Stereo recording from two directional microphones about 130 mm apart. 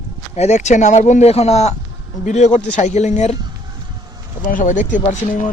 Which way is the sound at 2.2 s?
65° left (ahead or behind).